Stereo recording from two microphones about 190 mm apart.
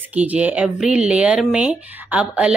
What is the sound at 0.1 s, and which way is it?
Speech, 5° right (ahead or behind).